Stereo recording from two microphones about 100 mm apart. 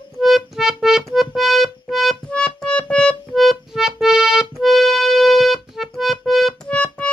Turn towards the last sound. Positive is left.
turn(degrees=10)  # may be behind; listen again after turning